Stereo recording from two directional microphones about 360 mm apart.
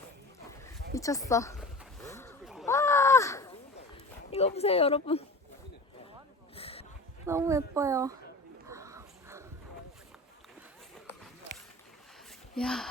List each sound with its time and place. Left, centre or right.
0.9 s a sound: centre
4.3 s speech: centre
6.6 s a sound: centre
7.3 s a child's voice: centre
8.6 s dog: centre
12.5 s speech: centre